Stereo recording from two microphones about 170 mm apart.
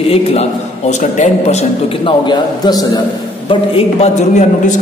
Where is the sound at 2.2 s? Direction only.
25° left (ahead or behind).